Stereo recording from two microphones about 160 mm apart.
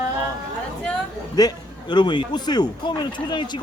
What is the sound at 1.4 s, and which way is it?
Speech, 25° left (ahead or behind).